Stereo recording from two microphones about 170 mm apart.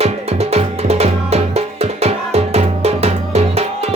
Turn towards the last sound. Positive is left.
turn(degrees=-40)  # may be behind; listen again after turning